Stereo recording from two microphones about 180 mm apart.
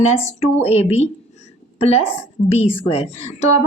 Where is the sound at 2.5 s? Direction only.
35° left (ahead or behind).